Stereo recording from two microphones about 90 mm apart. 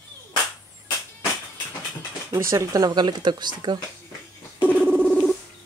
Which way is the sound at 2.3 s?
35° right (ahead or behind).